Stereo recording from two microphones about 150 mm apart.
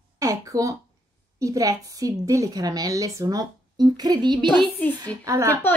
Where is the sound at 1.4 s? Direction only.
20° right (ahead or behind).